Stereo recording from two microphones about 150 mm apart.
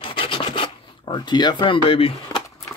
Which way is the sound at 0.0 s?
35° left (ahead or behind).